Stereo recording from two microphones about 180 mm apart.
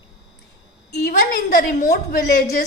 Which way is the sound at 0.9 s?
55° left (ahead or behind).